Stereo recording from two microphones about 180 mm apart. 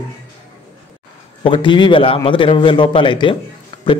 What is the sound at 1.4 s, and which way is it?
Speech, 25° left (ahead or behind).